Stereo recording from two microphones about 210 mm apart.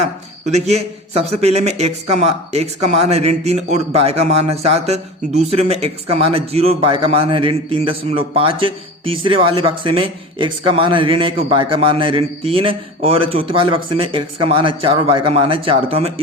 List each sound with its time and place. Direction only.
0.5 s a man's voice: 30° right (ahead or behind)